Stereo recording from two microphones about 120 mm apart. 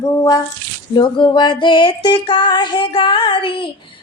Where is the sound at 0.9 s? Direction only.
45° left (ahead or behind).